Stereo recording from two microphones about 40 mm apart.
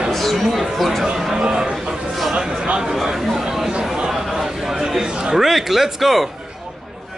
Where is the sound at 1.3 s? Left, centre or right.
Centre.